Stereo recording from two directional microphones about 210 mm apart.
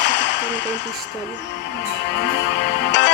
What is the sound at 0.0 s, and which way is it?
Whip, 55° left (ahead or behind).